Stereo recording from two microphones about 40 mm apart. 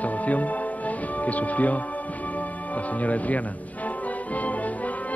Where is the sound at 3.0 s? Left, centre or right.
Left.